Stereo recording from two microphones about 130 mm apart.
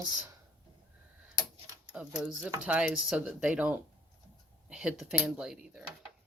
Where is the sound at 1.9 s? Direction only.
5° right (ahead or behind).